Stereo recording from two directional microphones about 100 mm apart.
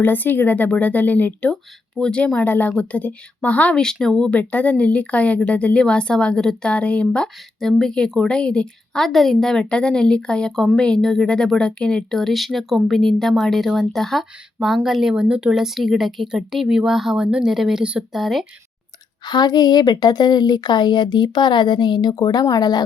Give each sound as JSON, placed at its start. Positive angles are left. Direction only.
{"t": 0.0, "sound": "a woman's voice", "side_deg": 20}
{"t": 19.2, "sound": "a woman's voice", "side_deg": 45}